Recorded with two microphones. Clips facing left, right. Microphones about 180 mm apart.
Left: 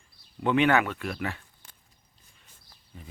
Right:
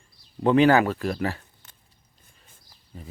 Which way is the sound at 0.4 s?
35° right (ahead or behind).